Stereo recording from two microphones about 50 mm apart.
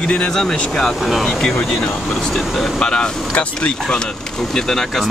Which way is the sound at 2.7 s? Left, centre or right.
Centre.